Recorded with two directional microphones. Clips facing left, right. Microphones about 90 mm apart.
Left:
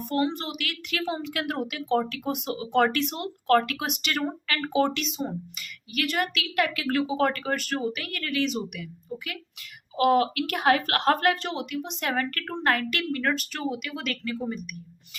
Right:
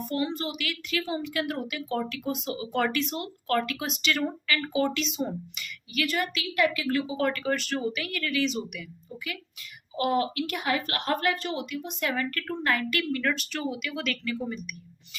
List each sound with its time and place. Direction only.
0.1 s speech: 60° left (ahead or behind)
2.0 s speech: 50° left (ahead or behind)
4.1 s speech: 40° left (ahead or behind)
5.9 s a woman's voice: 55° left (ahead or behind)
10.0 s a woman's voice: 90° left; by 13.2 s 55° left (ahead or behind)
13.2 s speech: 45° left (ahead or behind)